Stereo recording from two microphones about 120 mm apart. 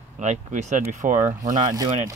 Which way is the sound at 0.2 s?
80° right.